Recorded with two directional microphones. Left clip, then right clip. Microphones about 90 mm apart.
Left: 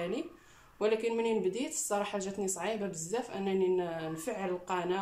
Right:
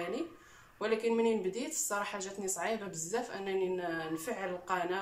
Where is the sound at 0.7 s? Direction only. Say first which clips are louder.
Left 1 dB; 35° left (ahead or behind).